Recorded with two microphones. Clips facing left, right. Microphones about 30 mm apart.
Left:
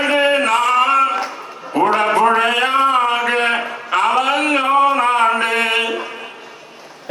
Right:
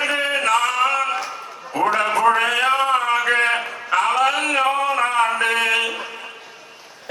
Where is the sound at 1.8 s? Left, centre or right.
Left.